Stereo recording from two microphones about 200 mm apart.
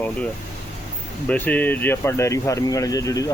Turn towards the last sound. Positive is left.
turn(degrees=15)  # may be behind; listen again after turning